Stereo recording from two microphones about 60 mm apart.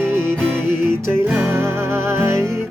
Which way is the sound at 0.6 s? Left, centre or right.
Right.